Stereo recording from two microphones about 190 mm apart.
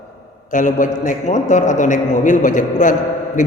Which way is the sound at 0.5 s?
45° left (ahead or behind).